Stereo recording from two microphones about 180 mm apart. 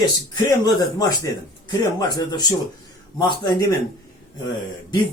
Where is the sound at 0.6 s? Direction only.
20° left (ahead or behind).